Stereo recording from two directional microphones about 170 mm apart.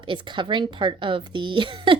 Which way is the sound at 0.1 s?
30° right (ahead or behind).